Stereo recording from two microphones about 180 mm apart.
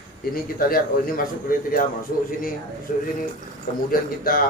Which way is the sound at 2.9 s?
45° left (ahead or behind).